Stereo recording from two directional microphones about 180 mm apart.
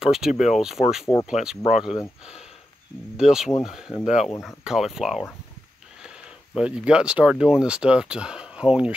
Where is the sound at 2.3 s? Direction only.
35° left (ahead or behind).